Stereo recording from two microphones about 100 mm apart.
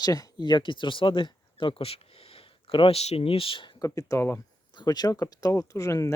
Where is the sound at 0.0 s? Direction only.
40° left (ahead or behind); by 3.7 s 65° left (ahead or behind).